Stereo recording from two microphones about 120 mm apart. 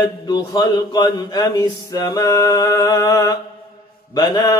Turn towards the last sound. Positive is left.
turn(degrees=35)  # may be behind; listen again after turning